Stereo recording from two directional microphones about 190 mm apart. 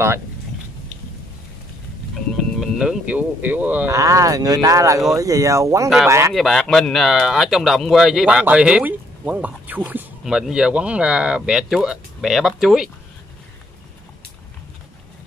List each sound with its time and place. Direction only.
2.3 s speech: centre (ahead or behind)
6.3 s speech: centre (ahead or behind)